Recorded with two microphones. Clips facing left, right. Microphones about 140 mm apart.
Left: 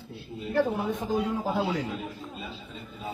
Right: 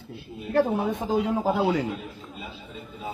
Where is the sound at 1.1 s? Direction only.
90° right.